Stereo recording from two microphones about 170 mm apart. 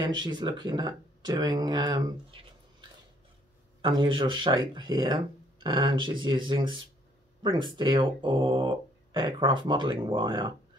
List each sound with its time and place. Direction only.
0.0 s speech: 25° right (ahead or behind)
3.8 s speech: 30° right (ahead or behind)